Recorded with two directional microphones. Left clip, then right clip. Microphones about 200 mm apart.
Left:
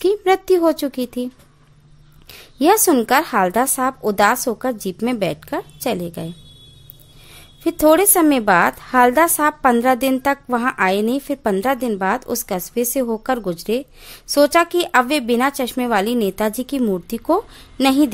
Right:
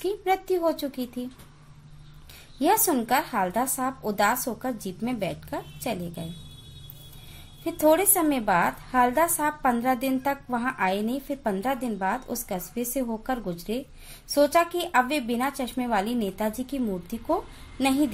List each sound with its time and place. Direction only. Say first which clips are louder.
0.0 s speech: left 10 dB; 50° left (ahead or behind)
2.3 s a woman's voice: left 8 dB; 50° left (ahead or behind)
7.6 s a woman's voice: left 8 dB; 50° left (ahead or behind)